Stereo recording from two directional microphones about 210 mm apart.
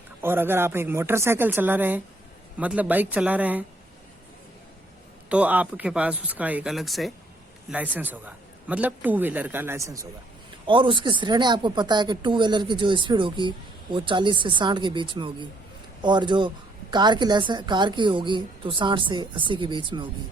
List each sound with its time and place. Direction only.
0.2 s a man's voice: 10° right (ahead or behind)
5.3 s a man's voice: 5° right (ahead or behind); by 20.1 s 20° right (ahead or behind)